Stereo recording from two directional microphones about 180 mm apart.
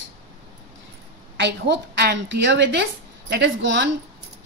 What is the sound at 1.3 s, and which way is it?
A woman's voice, 75° right (ahead or behind).